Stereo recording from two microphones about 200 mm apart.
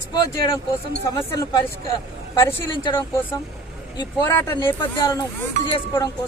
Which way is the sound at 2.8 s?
25° left (ahead or behind).